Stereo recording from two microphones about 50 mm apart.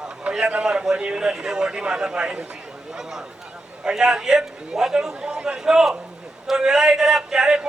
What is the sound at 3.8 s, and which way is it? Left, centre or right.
Speech, centre.